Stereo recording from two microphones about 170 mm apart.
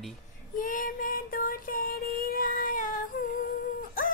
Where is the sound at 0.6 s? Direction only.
50° left (ahead or behind).